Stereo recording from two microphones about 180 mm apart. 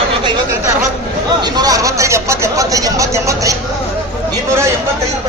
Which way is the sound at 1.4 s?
20° right (ahead or behind).